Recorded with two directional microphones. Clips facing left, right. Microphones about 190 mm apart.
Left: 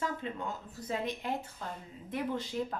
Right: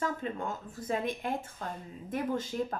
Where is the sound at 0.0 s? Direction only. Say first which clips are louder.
Right 2 dB; 50° right (ahead or behind).